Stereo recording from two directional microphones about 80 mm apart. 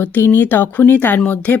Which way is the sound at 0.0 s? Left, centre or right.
Left.